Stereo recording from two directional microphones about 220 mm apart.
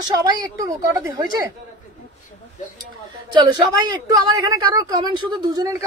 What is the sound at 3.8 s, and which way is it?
Speech, 15° right (ahead or behind).